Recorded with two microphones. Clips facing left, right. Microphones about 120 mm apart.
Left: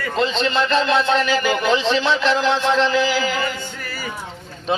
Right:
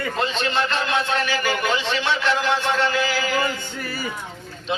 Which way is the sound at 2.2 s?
90° left.